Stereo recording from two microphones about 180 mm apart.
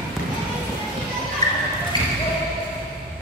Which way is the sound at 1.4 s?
20° left (ahead or behind).